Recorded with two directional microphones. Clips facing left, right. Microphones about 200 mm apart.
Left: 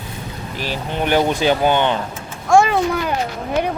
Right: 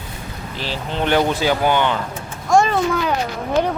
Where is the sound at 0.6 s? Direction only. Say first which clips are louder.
Left 1 dB; 15° left (ahead or behind).